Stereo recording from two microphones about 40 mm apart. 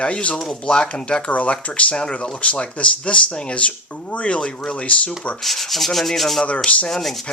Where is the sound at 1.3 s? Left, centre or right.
Left.